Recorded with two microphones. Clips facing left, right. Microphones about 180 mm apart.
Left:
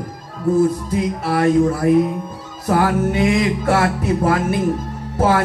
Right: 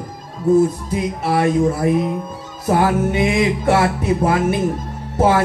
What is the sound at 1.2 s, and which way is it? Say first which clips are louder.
Music: left 1 dB; 20° right (ahead or behind).